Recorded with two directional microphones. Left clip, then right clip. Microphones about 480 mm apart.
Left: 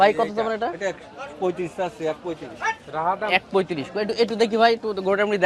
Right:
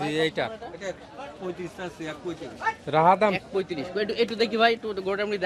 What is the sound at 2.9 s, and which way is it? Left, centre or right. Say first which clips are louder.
Speech: right 8 dB; right.